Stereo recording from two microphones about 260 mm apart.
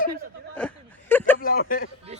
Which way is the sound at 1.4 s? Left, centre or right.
Left.